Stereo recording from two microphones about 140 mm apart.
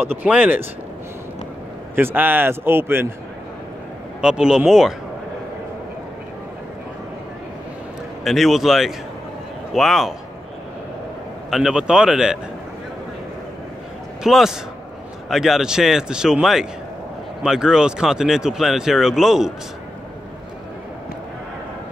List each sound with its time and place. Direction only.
0.2 s speech: 10° right (ahead or behind)
2.0 s speech: 15° right (ahead or behind)
4.2 s speech: 5° right (ahead or behind)
8.2 s speech: centre (ahead or behind)
11.5 s speech: 5° right (ahead or behind)
14.2 s speech: 5° right (ahead or behind)